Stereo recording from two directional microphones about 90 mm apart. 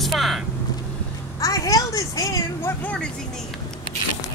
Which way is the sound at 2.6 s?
20° left (ahead or behind).